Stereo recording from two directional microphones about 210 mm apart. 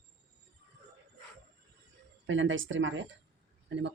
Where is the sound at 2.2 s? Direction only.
65° right (ahead or behind).